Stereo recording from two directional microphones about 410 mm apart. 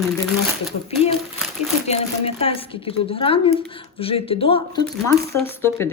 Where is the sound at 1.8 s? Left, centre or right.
Centre.